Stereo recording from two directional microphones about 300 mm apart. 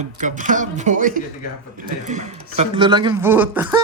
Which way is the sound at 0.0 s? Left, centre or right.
Right.